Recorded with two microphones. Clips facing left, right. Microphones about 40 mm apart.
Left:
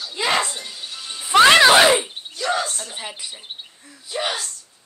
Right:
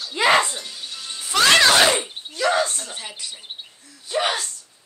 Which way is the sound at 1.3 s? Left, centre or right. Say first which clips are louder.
Left 5 dB; left.